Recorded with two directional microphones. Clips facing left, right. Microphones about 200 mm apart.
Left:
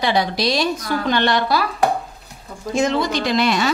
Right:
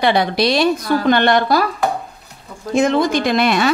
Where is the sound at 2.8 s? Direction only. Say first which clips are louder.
Right 4 dB; 50° right (ahead or behind).